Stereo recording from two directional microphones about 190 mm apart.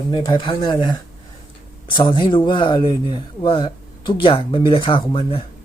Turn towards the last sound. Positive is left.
turn(degrees=30)  # may be behind; listen again after turning